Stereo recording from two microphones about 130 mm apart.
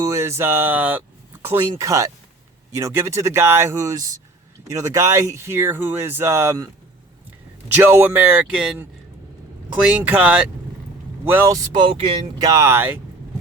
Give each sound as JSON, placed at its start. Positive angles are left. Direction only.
{"t": 0.0, "sound": "speech", "side_deg": -20}
{"t": 7.8, "sound": "speech", "side_deg": -15}
{"t": 9.8, "sound": "speech", "side_deg": -10}
{"t": 11.5, "sound": "speech", "side_deg": -35}
{"t": 12.5, "sound": "speech", "side_deg": -20}